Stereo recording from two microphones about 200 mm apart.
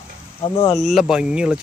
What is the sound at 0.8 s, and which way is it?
Speech, centre (ahead or behind).